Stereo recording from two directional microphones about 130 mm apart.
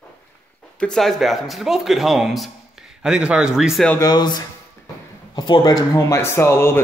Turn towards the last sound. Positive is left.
turn(degrees=20)  # may be behind; listen again after turning